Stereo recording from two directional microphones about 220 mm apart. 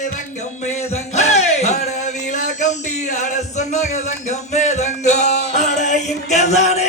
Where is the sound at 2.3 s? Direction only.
35° left (ahead or behind).